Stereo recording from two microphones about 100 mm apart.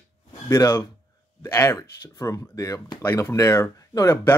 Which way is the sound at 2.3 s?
35° left (ahead or behind).